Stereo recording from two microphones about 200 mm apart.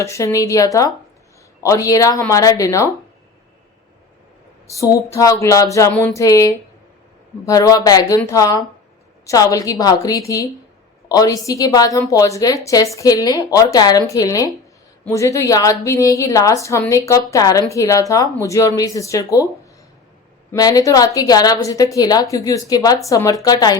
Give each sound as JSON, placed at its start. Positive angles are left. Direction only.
{"t": 0.0, "sound": "a woman's voice", "side_deg": 15}
{"t": 4.7, "sound": "a woman's voice", "side_deg": 15}
{"t": 20.5, "sound": "a woman's voice", "side_deg": 20}